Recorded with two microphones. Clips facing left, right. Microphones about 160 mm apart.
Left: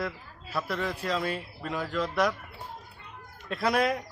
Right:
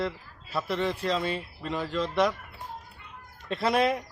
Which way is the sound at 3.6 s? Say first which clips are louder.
Right 1 dB; centre (ahead or behind).